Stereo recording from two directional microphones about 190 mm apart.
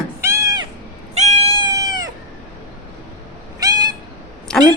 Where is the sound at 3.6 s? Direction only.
20° right (ahead or behind).